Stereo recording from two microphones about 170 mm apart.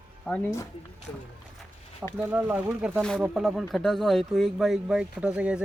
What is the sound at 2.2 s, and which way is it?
Speech, 10° right (ahead or behind).